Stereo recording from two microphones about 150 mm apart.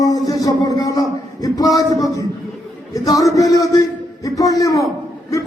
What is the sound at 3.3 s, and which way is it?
A man's voice, 25° left (ahead or behind).